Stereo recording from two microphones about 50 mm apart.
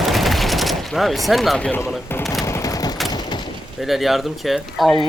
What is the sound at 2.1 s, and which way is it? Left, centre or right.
Speech, left.